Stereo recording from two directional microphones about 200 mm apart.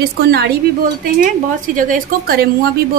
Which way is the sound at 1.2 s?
40° right (ahead or behind).